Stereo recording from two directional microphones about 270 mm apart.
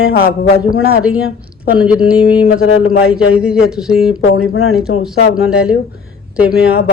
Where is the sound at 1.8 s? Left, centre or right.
Centre.